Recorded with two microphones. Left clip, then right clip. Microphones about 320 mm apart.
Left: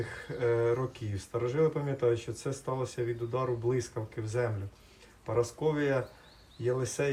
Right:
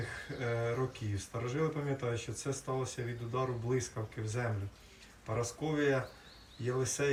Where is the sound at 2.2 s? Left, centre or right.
Left.